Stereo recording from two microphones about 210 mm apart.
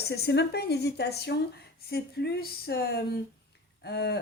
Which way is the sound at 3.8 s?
50° left (ahead or behind).